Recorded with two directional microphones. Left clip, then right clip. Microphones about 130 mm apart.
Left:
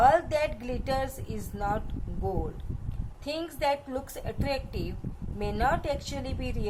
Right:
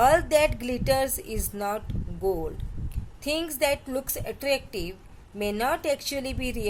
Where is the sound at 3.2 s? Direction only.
50° right (ahead or behind).